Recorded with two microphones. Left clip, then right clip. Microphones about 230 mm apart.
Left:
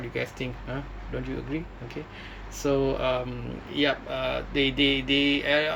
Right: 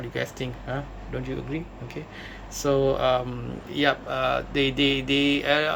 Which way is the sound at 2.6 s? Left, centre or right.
Centre.